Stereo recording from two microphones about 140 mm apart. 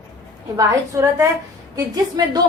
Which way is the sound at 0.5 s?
20° right (ahead or behind).